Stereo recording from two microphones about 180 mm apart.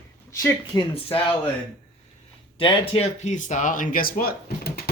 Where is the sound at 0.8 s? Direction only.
30° left (ahead or behind).